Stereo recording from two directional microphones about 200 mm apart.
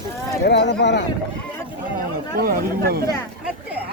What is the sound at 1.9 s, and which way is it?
Speech, 45° right (ahead or behind).